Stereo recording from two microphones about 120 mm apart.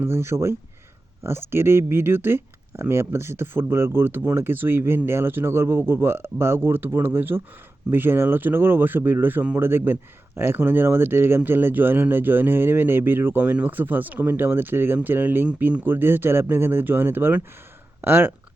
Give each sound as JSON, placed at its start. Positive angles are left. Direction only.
{"t": 0.0, "sound": "speech", "side_deg": -20}